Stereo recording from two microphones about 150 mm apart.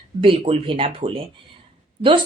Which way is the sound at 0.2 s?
40° right (ahead or behind).